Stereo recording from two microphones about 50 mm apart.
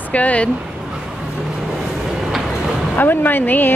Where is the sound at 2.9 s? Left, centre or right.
Left.